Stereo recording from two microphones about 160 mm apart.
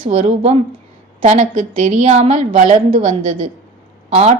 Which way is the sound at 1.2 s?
55° right (ahead or behind).